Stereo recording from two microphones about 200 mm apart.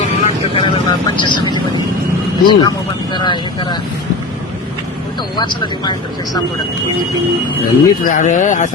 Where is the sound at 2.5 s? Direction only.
20° left (ahead or behind).